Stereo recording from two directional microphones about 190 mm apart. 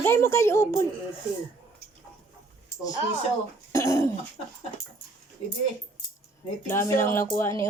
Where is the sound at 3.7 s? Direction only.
15° left (ahead or behind).